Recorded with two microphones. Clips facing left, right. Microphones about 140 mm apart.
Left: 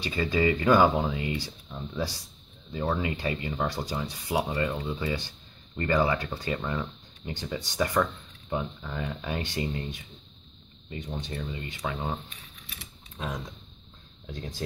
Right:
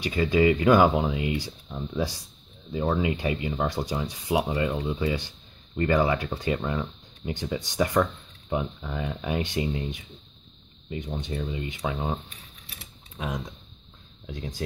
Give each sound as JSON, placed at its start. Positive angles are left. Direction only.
{"t": 0.0, "sound": "speech", "side_deg": -10}
{"t": 14.2, "sound": "speech", "side_deg": -10}